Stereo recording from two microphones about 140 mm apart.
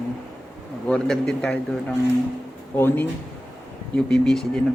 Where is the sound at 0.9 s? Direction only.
5° left (ahead or behind).